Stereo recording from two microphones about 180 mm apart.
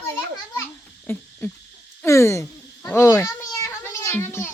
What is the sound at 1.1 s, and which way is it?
Owl, 15° left (ahead or behind).